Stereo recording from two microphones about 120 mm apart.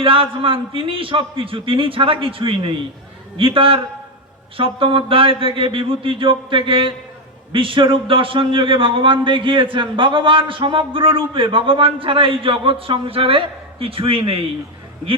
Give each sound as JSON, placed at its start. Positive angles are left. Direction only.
{"t": 0.0, "sound": "a man's voice", "side_deg": -50}